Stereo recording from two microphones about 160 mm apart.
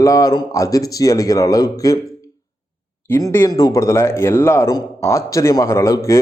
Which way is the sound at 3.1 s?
20° left (ahead or behind).